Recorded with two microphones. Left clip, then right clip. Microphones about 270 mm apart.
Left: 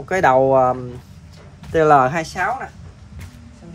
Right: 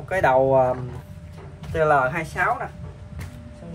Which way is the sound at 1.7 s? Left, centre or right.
Left.